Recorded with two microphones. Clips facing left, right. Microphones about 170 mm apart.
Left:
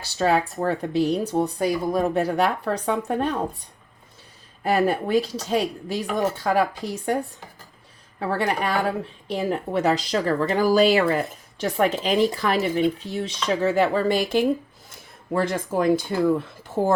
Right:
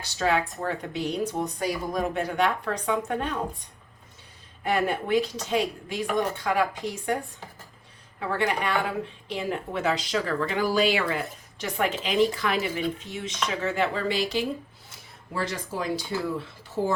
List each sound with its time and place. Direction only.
0.2 s speech: 35° left (ahead or behind)
4.6 s speech: 35° left (ahead or behind)
8.4 s speech: 40° left (ahead or behind)